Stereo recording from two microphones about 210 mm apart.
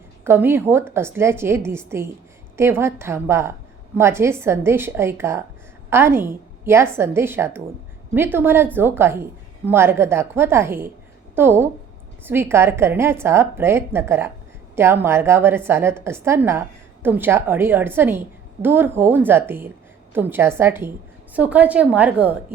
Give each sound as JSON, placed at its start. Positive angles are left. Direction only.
{"t": 0.3, "sound": "a woman's voice", "side_deg": -10}